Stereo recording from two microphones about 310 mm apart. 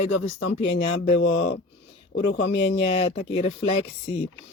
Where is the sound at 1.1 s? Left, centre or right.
Left.